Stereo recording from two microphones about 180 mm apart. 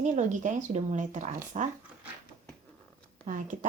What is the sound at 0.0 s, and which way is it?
Speech, 40° right (ahead or behind).